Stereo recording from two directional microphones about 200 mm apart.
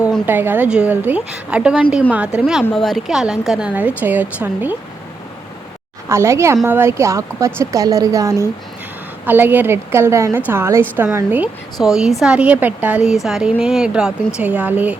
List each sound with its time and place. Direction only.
0.0 s a woman's voice: 5° right (ahead or behind)
6.1 s a woman's voice: 15° right (ahead or behind)